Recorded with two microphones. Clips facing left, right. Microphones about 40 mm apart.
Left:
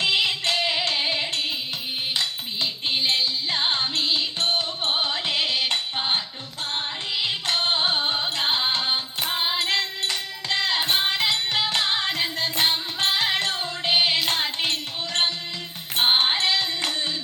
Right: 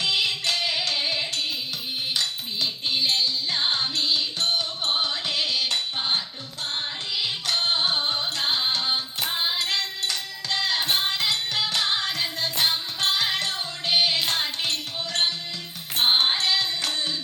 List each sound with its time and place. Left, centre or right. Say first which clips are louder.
0.0 s music: left 2 dB; left